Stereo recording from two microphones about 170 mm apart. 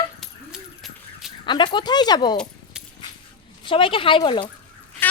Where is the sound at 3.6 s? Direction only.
30° left (ahead or behind).